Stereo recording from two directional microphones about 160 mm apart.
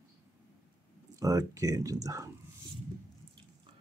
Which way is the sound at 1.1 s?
20° right (ahead or behind).